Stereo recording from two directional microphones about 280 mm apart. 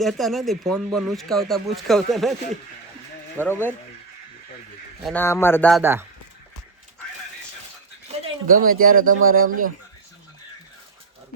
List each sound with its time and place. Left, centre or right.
0.0 s speech: centre
3.4 s speech: centre
5.0 s speech: centre
5.8 s speech: centre
8.0 s speech: right